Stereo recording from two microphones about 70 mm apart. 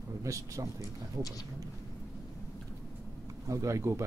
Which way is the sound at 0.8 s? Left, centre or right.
Left.